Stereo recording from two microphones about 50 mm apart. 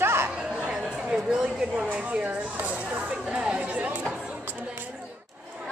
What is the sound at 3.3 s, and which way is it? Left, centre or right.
Chatter, centre.